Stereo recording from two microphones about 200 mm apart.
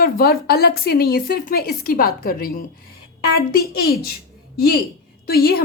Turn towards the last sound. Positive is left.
turn(degrees=50)  # may be behind; listen again after turning